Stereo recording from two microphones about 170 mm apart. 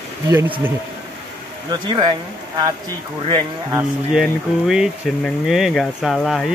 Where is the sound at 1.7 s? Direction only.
25° right (ahead or behind).